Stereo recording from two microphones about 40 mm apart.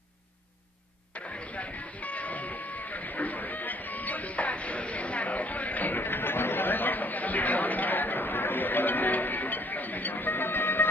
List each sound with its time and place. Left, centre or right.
1.1 s train: left